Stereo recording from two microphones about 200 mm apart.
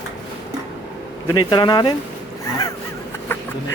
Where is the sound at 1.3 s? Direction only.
20° left (ahead or behind).